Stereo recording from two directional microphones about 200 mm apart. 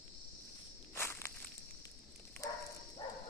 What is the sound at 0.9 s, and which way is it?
Walk, 10° left (ahead or behind).